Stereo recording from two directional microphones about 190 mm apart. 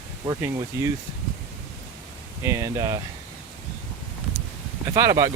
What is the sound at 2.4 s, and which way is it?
Speech, 15° right (ahead or behind).